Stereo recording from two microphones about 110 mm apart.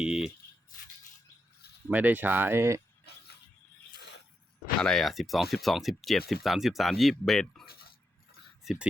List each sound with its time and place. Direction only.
0.0 s a sound: 5° right (ahead or behind)
1.9 s speech: 15° right (ahead or behind)
4.8 s speech: 5° left (ahead or behind)